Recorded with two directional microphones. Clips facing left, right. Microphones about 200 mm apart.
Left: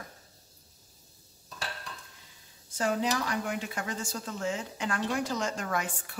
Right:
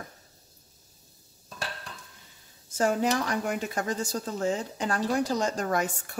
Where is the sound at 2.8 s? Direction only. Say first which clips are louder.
Right 4 dB; 50° right (ahead or behind).